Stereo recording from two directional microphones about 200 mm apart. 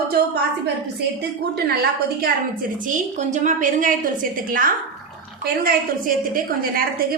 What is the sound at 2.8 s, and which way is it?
A woman's voice, 40° right (ahead or behind).